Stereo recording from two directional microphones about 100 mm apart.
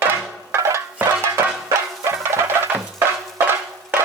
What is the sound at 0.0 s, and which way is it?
Music, 25° right (ahead or behind).